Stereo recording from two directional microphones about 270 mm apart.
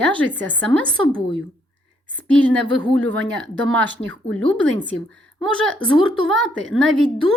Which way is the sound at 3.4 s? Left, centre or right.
Centre.